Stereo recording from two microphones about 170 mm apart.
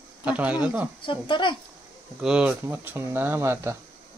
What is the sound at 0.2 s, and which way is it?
Speech, 10° right (ahead or behind).